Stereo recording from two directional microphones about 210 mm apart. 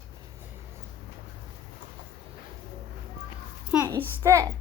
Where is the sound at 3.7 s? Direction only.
10° right (ahead or behind).